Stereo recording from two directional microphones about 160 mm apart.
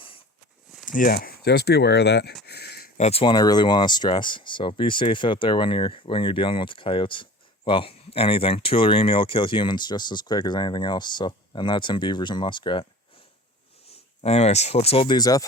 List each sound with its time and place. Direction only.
0.9 s speech: 55° left (ahead or behind)
1.1 s speech: 75° left (ahead or behind)
2.5 s a sound: 90° left
3.0 s speech: 40° left (ahead or behind)
13.9 s speech: 40° left (ahead or behind); by 15.4 s 25° left (ahead or behind)